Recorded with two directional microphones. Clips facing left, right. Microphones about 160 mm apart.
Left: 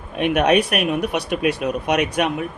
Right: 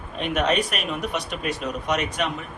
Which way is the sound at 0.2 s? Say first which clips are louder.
Left 6 dB; 65° left (ahead or behind).